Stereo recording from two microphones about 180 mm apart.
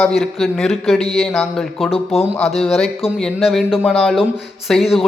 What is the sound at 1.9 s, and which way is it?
Speech, 35° left (ahead or behind).